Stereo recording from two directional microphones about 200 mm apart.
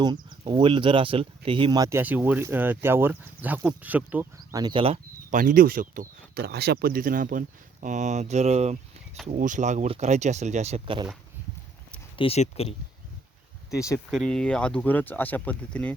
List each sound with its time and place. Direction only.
0.0 s speech: 20° right (ahead or behind)
5.3 s speech: 40° right (ahead or behind); by 11.1 s 25° right (ahead or behind)
12.1 s speech: 30° left (ahead or behind)
13.7 s speech: 15° left (ahead or behind)
14.1 s speech: centre (ahead or behind)